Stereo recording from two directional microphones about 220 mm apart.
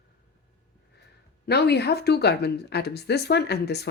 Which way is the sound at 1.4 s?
50° left (ahead or behind).